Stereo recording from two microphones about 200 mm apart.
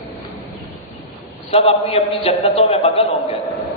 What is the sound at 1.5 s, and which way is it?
A man's voice, 30° left (ahead or behind).